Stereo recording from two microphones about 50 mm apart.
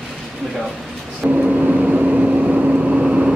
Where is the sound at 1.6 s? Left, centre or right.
Centre.